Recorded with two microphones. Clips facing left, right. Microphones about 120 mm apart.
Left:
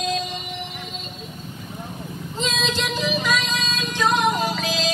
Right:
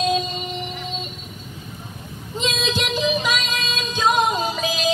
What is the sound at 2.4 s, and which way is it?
Music, 15° right (ahead or behind).